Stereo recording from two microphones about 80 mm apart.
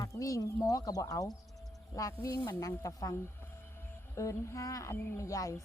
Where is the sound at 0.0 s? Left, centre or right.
Left.